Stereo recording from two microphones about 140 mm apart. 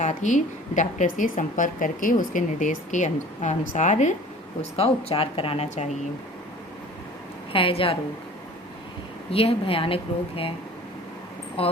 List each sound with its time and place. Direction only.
0.0 s a woman's voice: 60° left (ahead or behind)
4.8 s speech: 45° left (ahead or behind)
7.5 s speech: 40° left (ahead or behind)
9.3 s speech: 40° left (ahead or behind)
11.6 s speech: 40° left (ahead or behind)